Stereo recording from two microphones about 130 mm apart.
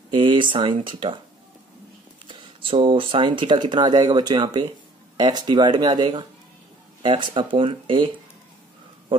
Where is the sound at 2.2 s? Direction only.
45° right (ahead or behind).